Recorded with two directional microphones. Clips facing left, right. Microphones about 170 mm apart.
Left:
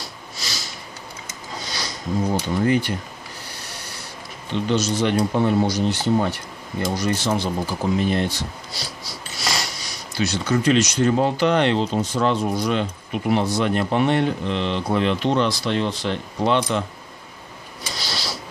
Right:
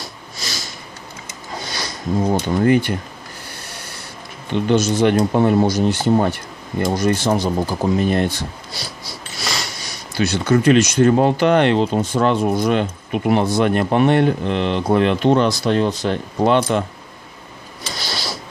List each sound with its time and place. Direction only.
0.4 s a sound: 50° right (ahead or behind)
1.6 s speech: 55° right (ahead or behind)
3.5 s a sound: 50° right (ahead or behind)
4.6 s speech: 50° right (ahead or behind)
9.8 s speech: 55° right (ahead or behind)
17.9 s mechanisms: 55° right (ahead or behind)